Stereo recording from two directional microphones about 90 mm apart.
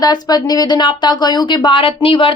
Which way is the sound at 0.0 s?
50° left (ahead or behind).